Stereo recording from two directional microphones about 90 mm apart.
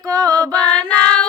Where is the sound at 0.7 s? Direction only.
10° left (ahead or behind).